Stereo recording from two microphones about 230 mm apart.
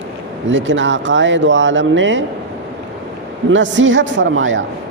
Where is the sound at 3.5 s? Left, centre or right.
Right.